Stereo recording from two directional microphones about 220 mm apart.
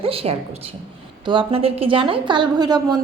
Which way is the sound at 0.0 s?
25° right (ahead or behind).